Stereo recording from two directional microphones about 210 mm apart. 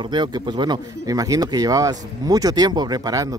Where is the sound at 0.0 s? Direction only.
20° right (ahead or behind).